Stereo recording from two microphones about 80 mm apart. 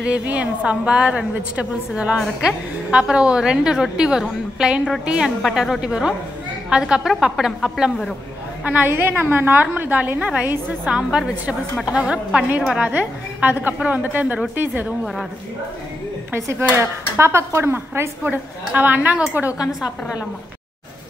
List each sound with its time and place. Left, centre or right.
0.0 s a woman's voice: centre
8.6 s a woman's voice: right
16.3 s speech: right
18.2 s a woman's voice: centre